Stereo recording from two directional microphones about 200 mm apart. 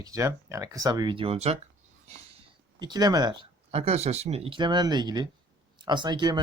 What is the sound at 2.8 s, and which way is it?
Speech, 20° right (ahead or behind).